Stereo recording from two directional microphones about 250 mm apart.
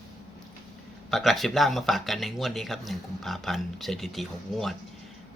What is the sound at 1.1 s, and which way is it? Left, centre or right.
Speech, centre.